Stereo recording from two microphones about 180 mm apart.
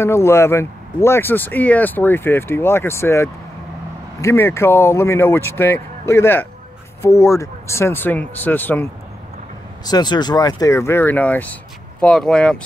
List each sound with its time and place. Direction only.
0.0 s speech: 15° left (ahead or behind)
9.8 s speech: 25° left (ahead or behind); by 12.5 s 5° left (ahead or behind)